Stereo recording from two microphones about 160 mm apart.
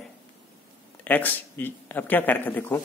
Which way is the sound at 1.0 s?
10° left (ahead or behind).